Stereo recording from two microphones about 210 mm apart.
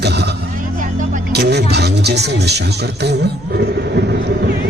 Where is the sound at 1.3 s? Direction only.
50° right (ahead or behind).